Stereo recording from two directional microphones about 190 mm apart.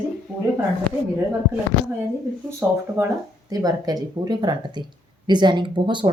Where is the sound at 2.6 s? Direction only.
5° right (ahead or behind).